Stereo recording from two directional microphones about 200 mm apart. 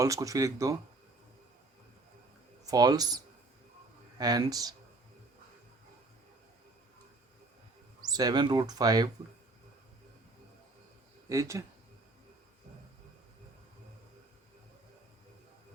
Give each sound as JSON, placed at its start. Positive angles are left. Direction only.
{"t": 0.0, "sound": "speech", "side_deg": -15}
{"t": 2.6, "sound": "speech", "side_deg": -20}
{"t": 4.2, "sound": "speech", "side_deg": -20}
{"t": 8.1, "sound": "speech", "side_deg": -20}
{"t": 11.3, "sound": "speech", "side_deg": -15}